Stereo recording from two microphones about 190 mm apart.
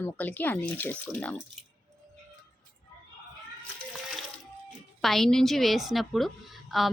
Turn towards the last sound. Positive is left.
turn(degrees=0)  # may be behind; listen again after turning